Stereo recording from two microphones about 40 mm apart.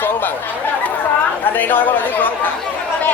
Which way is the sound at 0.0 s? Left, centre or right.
Left.